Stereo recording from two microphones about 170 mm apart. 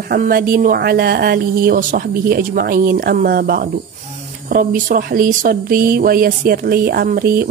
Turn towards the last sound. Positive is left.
turn(degrees=-60)  # may be behind; listen again after turning